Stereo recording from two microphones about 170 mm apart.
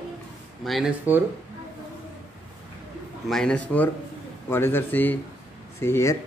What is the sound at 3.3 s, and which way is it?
A man's voice, 5° left (ahead or behind).